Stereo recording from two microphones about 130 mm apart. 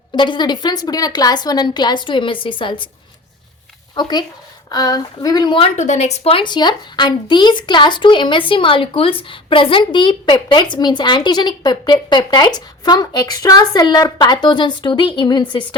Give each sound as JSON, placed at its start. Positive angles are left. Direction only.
{"t": 0.1, "sound": "speech", "side_deg": 35}
{"t": 3.9, "sound": "speech", "side_deg": 30}
{"t": 5.7, "sound": "a woman's voice", "side_deg": 60}
{"t": 6.2, "sound": "speech", "side_deg": 40}